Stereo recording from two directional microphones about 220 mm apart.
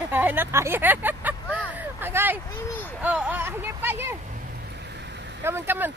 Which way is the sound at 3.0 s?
5° right (ahead or behind).